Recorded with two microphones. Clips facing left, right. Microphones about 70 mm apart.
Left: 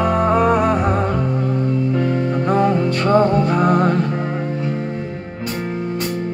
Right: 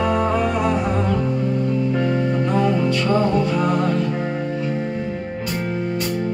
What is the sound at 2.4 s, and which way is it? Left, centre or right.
Music, left.